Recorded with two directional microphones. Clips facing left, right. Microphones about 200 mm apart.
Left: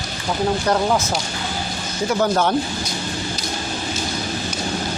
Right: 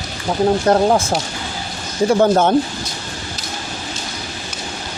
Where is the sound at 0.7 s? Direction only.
35° right (ahead or behind).